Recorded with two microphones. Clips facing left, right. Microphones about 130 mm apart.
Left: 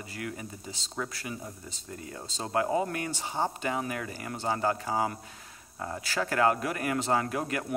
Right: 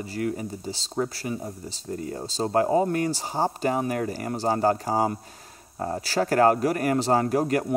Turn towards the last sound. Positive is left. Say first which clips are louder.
# right 7 dB
turn(degrees=-40)  # may be behind; listen again after turning